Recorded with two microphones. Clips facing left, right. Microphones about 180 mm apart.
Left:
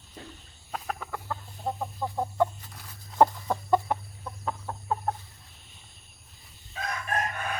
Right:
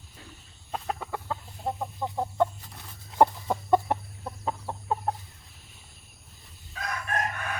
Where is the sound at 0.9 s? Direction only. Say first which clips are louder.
Right 2 dB; 20° right (ahead or behind).